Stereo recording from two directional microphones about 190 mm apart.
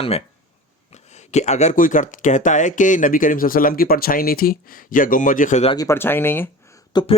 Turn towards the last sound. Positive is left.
turn(degrees=20)  # may be behind; listen again after turning